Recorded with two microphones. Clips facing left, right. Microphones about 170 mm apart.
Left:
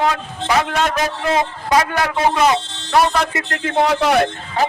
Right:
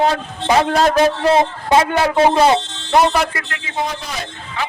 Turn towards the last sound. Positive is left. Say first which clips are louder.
# left 6 dB
turn(degrees=40)  # may be behind; listen again after turning